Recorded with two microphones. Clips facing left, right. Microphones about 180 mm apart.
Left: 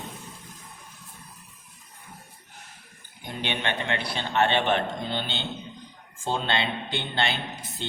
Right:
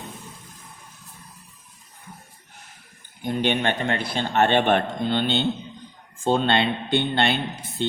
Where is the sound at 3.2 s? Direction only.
50° right (ahead or behind).